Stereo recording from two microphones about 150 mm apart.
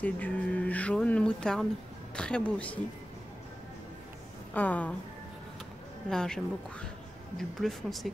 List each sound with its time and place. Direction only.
0.0 s speech: 10° left (ahead or behind)
4.6 s speech: 10° left (ahead or behind)
6.0 s speech: 5° left (ahead or behind)